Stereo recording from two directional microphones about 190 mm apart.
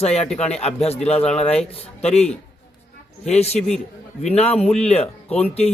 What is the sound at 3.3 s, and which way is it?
A man's voice, 35° left (ahead or behind).